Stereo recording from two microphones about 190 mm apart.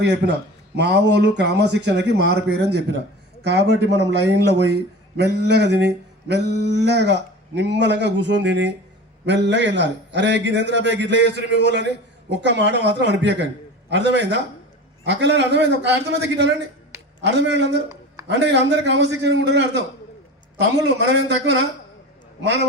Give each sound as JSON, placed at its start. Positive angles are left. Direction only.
{"t": 0.0, "sound": "a man's voice", "side_deg": -60}